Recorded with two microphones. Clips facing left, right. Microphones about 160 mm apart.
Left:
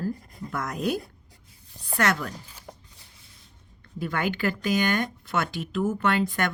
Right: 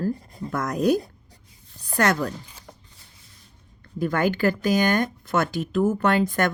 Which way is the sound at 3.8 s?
40° right (ahead or behind).